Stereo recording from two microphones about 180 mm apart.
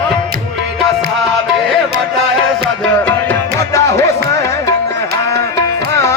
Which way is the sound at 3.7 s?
15° left (ahead or behind).